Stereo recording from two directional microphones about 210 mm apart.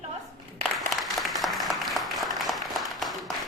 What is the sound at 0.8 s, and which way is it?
Applause, centre (ahead or behind).